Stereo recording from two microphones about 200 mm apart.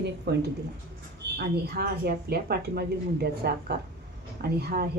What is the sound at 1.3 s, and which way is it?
A woman's voice, 50° right (ahead or behind).